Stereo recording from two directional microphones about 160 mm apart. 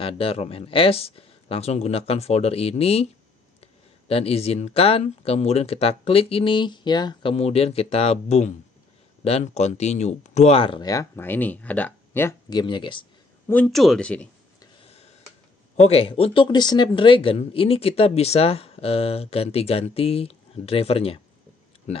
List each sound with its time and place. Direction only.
0.0 s speech: 35° left (ahead or behind)
7.3 s speech: 40° left (ahead or behind); by 12.4 s 15° left (ahead or behind)
12.4 s speech: 25° left (ahead or behind)
13.5 s speech: 5° left (ahead or behind)
14.8 s a sound: 40° left (ahead or behind)
15.7 s speech: 40° left (ahead or behind)